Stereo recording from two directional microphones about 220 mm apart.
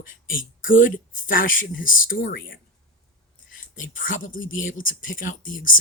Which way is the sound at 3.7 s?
40° left (ahead or behind).